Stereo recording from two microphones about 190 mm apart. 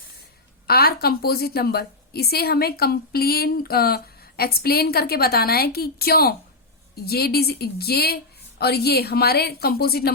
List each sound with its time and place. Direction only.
0.7 s a woman's voice: 55° left (ahead or behind)